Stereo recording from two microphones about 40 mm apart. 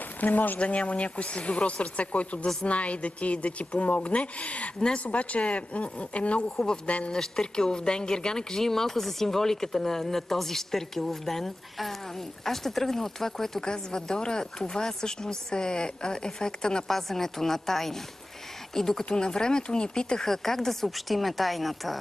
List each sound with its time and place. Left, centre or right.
0.2 s speech: left
0.6 s speech: left
7.1 s speech: centre
16.8 s speech: centre
19.0 s speech: left
20.2 s speech: centre